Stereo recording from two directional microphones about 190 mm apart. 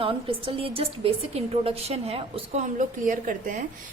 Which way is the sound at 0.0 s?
25° right (ahead or behind).